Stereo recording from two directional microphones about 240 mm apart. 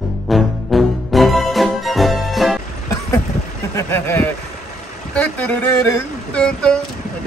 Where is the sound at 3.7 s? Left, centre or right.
Centre.